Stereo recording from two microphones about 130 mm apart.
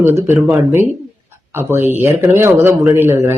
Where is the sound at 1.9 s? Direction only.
15° right (ahead or behind).